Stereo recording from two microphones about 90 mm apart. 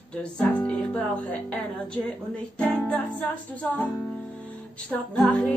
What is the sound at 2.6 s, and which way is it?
Music, 15° left (ahead or behind).